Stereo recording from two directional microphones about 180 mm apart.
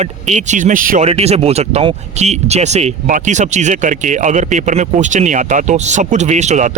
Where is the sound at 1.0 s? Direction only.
35° right (ahead or behind).